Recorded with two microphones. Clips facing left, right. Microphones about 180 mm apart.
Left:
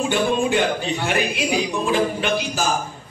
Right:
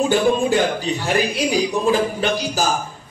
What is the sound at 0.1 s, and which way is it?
A man's voice, 40° right (ahead or behind).